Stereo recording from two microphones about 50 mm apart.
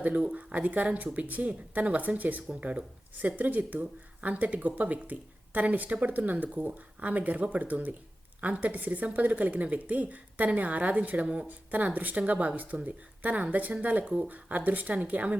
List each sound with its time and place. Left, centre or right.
0.0 s a woman's voice: right